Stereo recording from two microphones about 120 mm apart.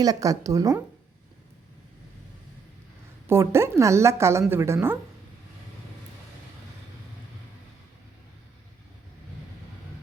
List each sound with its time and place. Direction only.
0.0 s a woman's voice: 30° right (ahead or behind)
3.2 s a woman's voice: 20° right (ahead or behind)